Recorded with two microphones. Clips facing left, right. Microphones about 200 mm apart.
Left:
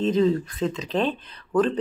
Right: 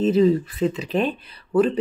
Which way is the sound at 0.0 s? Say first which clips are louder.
Right 3 dB; 5° right (ahead or behind).